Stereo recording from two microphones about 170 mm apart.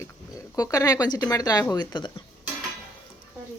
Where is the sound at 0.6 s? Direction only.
20° left (ahead or behind).